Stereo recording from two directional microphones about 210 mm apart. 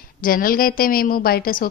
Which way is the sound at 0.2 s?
45° left (ahead or behind).